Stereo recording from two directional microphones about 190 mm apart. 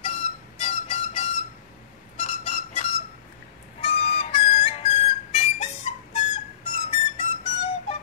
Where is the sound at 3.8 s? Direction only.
30° left (ahead or behind).